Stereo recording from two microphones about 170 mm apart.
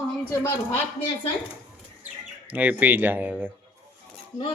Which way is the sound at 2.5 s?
10° right (ahead or behind).